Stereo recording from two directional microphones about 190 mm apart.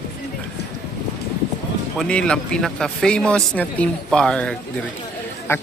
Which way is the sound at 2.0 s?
5° left (ahead or behind).